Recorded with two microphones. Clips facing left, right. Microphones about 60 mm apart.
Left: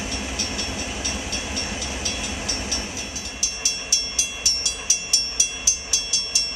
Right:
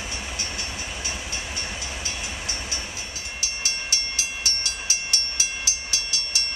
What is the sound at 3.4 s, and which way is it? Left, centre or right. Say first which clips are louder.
Train: right 4 dB; right.